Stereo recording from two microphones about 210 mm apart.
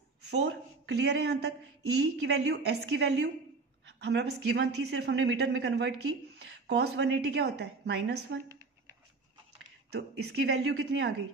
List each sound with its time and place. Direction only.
0.3 s speech: 55° right (ahead or behind)
9.9 s speech: 50° right (ahead or behind)